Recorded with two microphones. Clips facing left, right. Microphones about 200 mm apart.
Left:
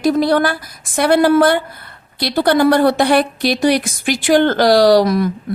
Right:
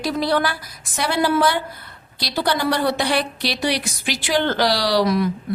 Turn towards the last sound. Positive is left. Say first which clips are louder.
# left 8 dB
turn(degrees=45)  # may be behind; listen again after turning